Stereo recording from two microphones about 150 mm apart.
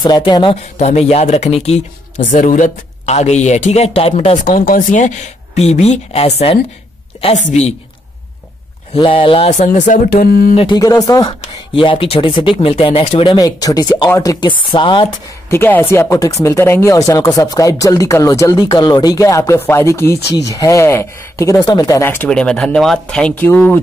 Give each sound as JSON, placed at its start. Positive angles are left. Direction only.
{"t": 0.0, "sound": "speech", "side_deg": 30}
{"t": 0.7, "sound": "speech", "side_deg": 45}
{"t": 8.9, "sound": "speech", "side_deg": 35}
{"t": 9.7, "sound": "speech", "side_deg": 60}
{"t": 10.5, "sound": "speech", "side_deg": 40}
{"t": 10.8, "sound": "speech", "side_deg": 25}
{"t": 14.5, "sound": "speech", "side_deg": 35}
{"t": 15.5, "sound": "speech", "side_deg": 15}
{"t": 22.3, "sound": "speech", "side_deg": 5}